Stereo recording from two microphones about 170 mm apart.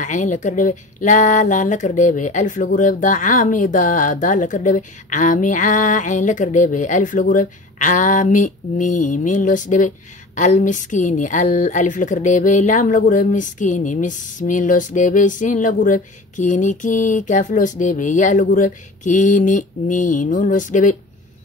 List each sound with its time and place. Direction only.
0.0 s speech: 45° left (ahead or behind)